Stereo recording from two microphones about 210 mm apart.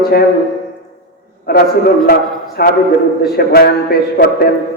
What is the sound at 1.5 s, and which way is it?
A man's voice, 50° left (ahead or behind).